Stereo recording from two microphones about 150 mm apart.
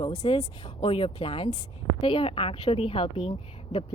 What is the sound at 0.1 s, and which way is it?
A woman's voice, 45° left (ahead or behind).